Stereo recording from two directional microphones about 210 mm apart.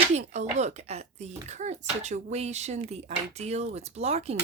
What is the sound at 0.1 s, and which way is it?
Speech, 35° right (ahead or behind).